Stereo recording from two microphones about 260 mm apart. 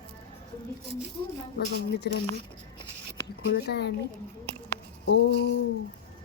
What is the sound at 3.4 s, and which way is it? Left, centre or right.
Speech, left.